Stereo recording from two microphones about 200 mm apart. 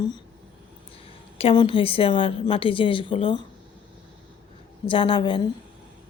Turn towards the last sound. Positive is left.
turn(degrees=25)  # may be behind; listen again after turning